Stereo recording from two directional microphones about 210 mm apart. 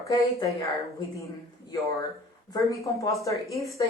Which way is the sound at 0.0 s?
15° left (ahead or behind).